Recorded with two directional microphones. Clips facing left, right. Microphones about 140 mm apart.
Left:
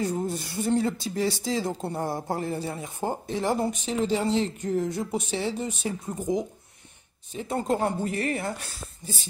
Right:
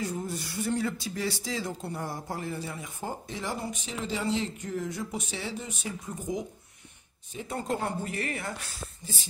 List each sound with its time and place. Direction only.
0.0 s speech: 35° left (ahead or behind)
7.3 s speech: 30° left (ahead or behind)